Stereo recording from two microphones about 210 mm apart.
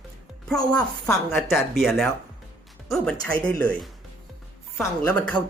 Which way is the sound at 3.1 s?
10° left (ahead or behind).